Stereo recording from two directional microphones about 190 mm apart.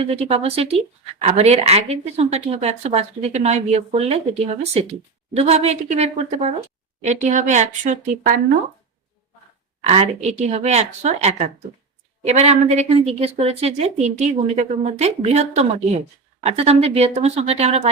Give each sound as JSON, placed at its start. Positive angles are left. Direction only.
{"t": 0.0, "sound": "a woman's voice", "side_deg": -35}
{"t": 9.8, "sound": "a woman's voice", "side_deg": -35}